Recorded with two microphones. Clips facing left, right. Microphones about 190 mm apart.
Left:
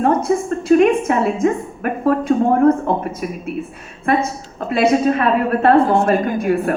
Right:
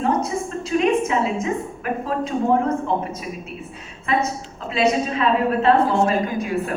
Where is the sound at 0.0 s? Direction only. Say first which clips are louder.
Left 6 dB; 55° left (ahead or behind).